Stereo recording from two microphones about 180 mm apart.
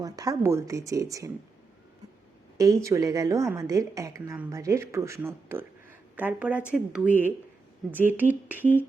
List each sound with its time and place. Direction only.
0.0 s a woman's voice: 20° right (ahead or behind)
2.6 s a woman's voice: 15° right (ahead or behind)